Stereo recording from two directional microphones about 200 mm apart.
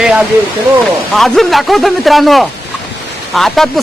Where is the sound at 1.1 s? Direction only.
Centre (ahead or behind).